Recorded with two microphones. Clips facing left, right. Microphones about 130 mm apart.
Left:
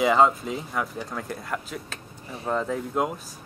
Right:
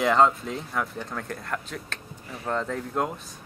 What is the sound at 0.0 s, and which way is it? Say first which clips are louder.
Speech: left 1 dB; 5° left (ahead or behind).